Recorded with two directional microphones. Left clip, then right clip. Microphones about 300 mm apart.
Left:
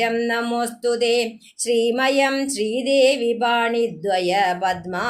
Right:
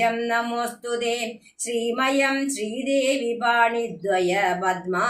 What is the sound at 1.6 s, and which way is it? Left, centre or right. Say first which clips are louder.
Speech: left 5 dB; left.